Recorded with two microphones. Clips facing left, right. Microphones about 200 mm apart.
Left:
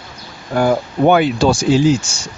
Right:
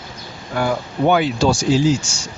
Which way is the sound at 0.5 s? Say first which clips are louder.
Left 5 dB; 45° left (ahead or behind).